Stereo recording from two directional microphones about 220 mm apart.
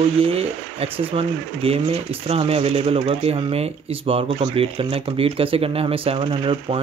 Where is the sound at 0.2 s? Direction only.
25° right (ahead or behind).